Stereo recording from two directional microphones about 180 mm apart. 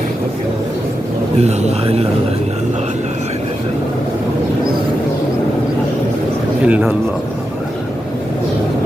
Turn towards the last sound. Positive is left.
turn(degrees=-10)  # may be behind; listen again after turning